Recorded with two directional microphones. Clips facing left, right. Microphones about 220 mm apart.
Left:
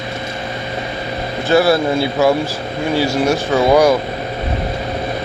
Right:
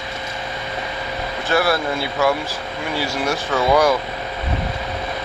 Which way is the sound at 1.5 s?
25° left (ahead or behind).